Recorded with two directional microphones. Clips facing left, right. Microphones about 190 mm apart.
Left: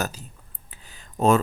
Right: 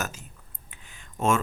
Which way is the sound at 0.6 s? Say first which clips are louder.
Left 2 dB; 35° left (ahead or behind).